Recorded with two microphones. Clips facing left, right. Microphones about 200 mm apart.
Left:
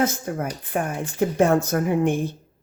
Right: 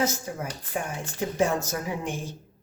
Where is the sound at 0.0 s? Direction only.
55° left (ahead or behind).